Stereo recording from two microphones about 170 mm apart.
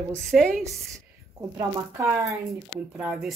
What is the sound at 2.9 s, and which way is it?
Speech, 5° right (ahead or behind).